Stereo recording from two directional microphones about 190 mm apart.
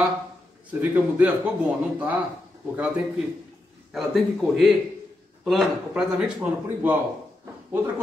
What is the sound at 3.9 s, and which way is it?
A man's voice, centre (ahead or behind).